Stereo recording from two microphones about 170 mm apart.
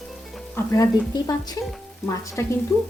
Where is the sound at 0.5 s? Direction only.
20° left (ahead or behind).